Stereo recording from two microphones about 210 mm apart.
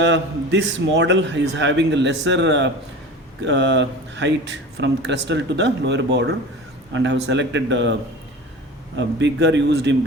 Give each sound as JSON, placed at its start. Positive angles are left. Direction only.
{"t": 0.0, "sound": "speech", "side_deg": -60}
{"t": 9.0, "sound": "speech", "side_deg": -55}